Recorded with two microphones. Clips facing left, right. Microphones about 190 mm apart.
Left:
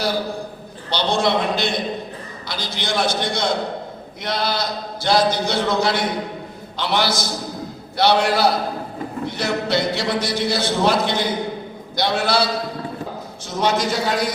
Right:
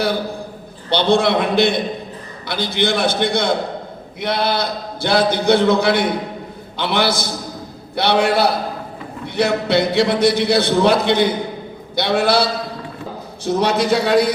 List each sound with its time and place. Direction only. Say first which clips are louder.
0.9 s a man's voice: right 5 dB; 55° right (ahead or behind)
13.4 s a man's voice: right 4 dB; 60° right (ahead or behind)